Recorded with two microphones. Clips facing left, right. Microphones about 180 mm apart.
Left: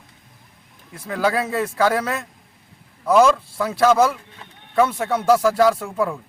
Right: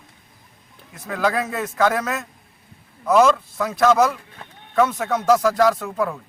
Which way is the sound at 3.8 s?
30° left (ahead or behind).